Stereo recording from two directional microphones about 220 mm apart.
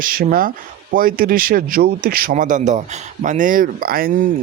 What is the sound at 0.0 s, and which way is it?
Speech, 40° right (ahead or behind).